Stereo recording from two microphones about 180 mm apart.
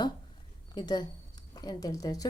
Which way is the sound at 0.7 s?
25° left (ahead or behind).